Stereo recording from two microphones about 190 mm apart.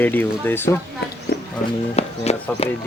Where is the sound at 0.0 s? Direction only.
10° left (ahead or behind).